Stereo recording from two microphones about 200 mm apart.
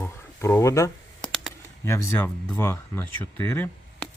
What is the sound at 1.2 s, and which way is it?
Computer keyboard, 5° left (ahead or behind).